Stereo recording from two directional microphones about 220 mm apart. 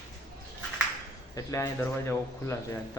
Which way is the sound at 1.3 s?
15° left (ahead or behind).